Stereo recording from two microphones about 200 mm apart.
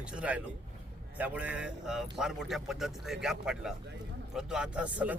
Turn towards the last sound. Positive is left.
turn(degrees=-5)  # may be behind; listen again after turning